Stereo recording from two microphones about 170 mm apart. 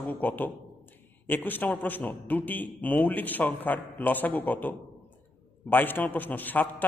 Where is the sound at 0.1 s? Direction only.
10° left (ahead or behind).